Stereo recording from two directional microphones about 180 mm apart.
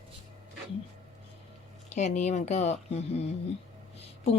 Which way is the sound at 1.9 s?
40° left (ahead or behind).